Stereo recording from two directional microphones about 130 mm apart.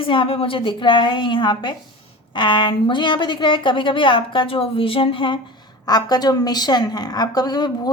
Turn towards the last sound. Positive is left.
turn(degrees=30)  # may be behind; listen again after turning